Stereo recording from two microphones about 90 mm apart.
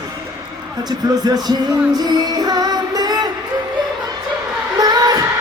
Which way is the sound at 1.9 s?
50° right (ahead or behind).